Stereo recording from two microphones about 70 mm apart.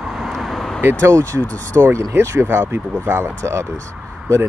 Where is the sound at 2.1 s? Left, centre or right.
Right.